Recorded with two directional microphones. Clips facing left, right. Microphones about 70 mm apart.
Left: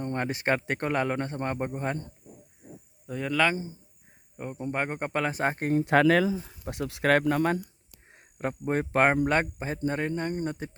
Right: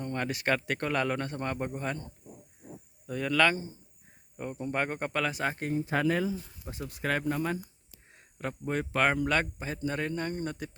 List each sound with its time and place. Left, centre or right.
0.0 s speech: left
3.1 s speech: centre
5.3 s speech: left
5.7 s speech: left
8.0 s speech: left